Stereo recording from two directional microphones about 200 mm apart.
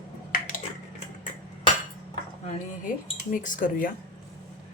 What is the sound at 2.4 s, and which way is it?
Speech, 40° left (ahead or behind).